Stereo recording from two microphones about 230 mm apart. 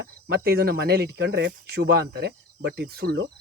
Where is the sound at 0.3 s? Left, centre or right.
Right.